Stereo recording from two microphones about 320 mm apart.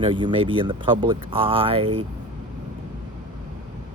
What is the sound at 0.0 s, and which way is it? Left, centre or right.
Speech, centre.